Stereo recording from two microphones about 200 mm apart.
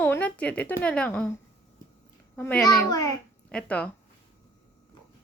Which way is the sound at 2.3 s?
5° left (ahead or behind).